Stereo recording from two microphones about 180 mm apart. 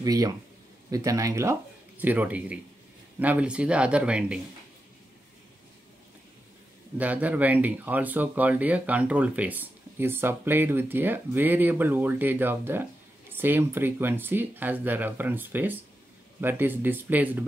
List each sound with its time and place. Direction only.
0.0 s speech: 20° right (ahead or behind)
7.0 s speech: 10° right (ahead or behind)